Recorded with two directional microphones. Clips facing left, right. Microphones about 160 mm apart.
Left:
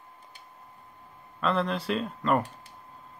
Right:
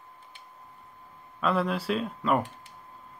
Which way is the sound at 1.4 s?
10° right (ahead or behind).